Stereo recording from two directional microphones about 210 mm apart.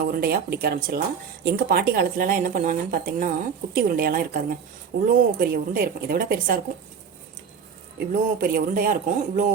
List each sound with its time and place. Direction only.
0.0 s speech: 45° right (ahead or behind)
7.9 s speech: 45° right (ahead or behind)